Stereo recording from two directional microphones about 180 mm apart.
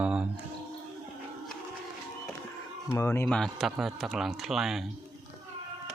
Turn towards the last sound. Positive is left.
turn(degrees=0)  # may be behind; listen again after turning